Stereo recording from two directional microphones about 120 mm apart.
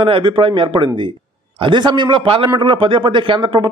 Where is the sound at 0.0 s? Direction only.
45° right (ahead or behind).